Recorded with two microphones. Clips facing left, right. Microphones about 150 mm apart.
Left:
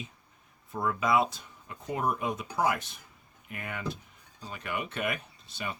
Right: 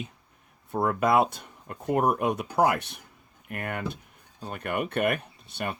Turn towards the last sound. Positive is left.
turn(degrees=-60)  # may be behind; listen again after turning